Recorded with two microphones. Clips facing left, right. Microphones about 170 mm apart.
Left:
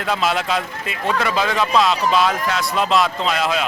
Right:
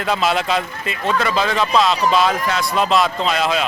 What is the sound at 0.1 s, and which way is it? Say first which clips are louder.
Speech: right 2 dB; centre (ahead or behind).